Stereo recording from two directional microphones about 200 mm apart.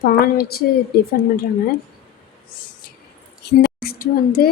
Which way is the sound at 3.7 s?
50° left (ahead or behind).